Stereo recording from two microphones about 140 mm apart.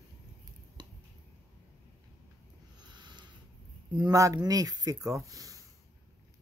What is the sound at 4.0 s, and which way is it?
Speech, 25° right (ahead or behind).